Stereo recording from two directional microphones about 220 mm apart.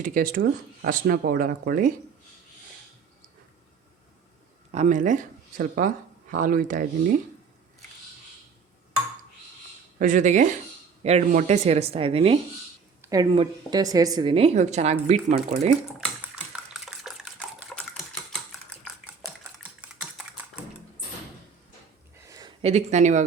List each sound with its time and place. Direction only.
0.0 s speech: 40° right (ahead or behind)
4.7 s speech: 35° right (ahead or behind)
10.0 s speech: 35° right (ahead or behind)
13.0 s a sound: 15° right (ahead or behind)
13.3 s speech: 20° right (ahead or behind)
16.8 s typewriter: centre (ahead or behind)
19.8 s typing: 5° right (ahead or behind)
22.2 s a sound: 15° right (ahead or behind)
22.6 s speech: 30° right (ahead or behind)